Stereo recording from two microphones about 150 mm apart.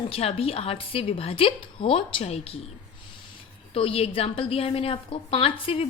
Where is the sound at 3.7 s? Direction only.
40° left (ahead or behind).